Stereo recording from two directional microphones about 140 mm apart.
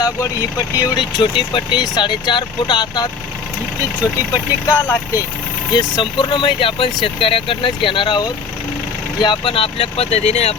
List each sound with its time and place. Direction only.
0.8 s speech: 25° left (ahead or behind)
4.7 s speech: 20° left (ahead or behind)
5.7 s speech: 35° left (ahead or behind)